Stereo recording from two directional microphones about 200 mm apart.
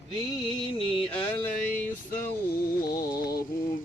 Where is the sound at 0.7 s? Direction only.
25° left (ahead or behind).